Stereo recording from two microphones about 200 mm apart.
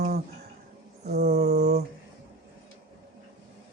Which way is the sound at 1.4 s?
50° right (ahead or behind).